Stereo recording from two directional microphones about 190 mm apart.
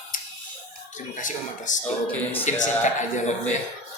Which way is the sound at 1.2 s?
40° left (ahead or behind).